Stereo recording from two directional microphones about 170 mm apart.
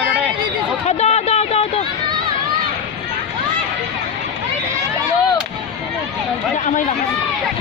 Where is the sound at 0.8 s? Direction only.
40° left (ahead or behind).